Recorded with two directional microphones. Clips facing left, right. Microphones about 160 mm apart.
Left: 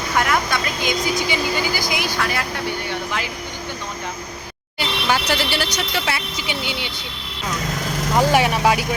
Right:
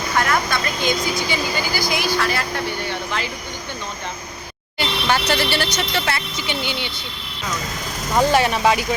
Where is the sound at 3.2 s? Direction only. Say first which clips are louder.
Right 1 dB; 10° left (ahead or behind).